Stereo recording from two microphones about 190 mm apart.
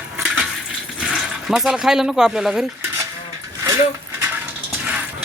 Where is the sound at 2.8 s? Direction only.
15° right (ahead or behind).